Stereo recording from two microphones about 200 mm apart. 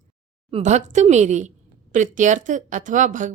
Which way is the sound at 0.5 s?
35° right (ahead or behind).